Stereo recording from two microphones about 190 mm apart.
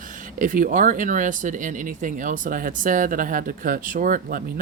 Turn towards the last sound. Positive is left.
turn(degrees=-50)  # may be behind; listen again after turning